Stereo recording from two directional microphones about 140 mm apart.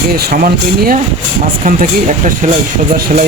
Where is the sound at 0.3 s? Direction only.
90° right.